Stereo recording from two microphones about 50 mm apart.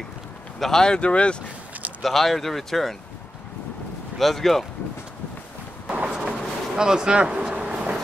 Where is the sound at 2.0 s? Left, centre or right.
Centre.